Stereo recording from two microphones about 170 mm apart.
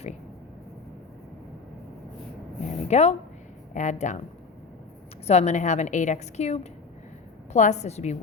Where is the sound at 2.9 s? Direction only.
40° left (ahead or behind).